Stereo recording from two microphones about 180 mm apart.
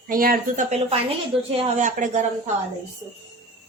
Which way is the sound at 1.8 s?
45° right (ahead or behind).